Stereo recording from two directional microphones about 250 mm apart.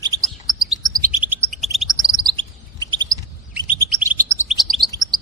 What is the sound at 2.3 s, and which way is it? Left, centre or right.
Chirp, centre.